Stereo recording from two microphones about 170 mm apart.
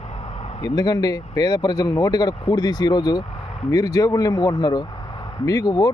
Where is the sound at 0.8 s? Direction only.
25° left (ahead or behind).